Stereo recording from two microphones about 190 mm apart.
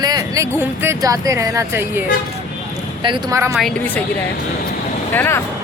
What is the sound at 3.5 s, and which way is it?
Speech, 5° left (ahead or behind).